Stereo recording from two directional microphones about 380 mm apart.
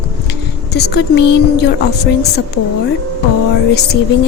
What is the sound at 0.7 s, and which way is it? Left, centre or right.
Speech, left.